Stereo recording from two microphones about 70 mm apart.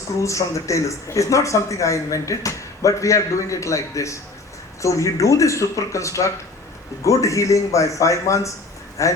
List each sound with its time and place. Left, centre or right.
0.2 s speech: left